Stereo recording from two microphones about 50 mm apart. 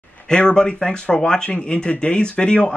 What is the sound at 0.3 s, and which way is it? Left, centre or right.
Speech, centre.